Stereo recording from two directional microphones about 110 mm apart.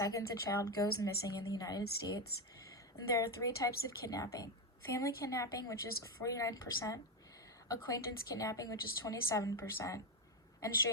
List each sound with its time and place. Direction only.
0.0 s a woman's voice: 30° left (ahead or behind)